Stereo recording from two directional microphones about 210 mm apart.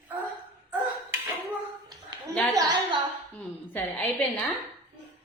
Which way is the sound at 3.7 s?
10° left (ahead or behind).